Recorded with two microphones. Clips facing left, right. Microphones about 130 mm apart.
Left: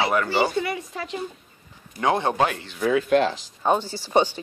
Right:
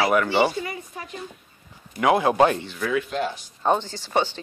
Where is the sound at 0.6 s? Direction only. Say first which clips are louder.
Left 4 dB; 90° left.